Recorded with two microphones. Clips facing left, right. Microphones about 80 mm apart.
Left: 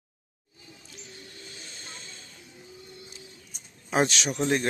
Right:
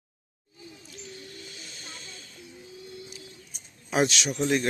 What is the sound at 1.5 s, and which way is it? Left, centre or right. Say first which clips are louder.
Hiss: even; left.